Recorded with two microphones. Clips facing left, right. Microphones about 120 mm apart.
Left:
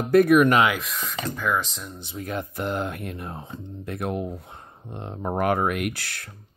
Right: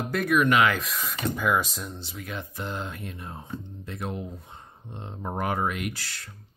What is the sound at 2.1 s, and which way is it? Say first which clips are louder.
Speech: left 8 dB; 40° left (ahead or behind).